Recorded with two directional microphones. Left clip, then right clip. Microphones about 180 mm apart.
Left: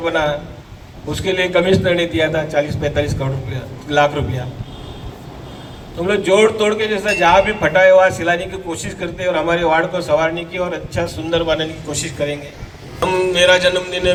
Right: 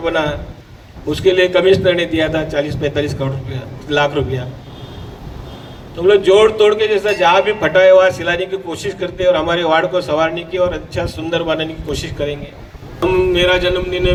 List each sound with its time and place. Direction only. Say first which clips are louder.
0.0 s a man's voice: even; 45° right (ahead or behind)
6.0 s a man's voice: right 4 dB; 45° right (ahead or behind)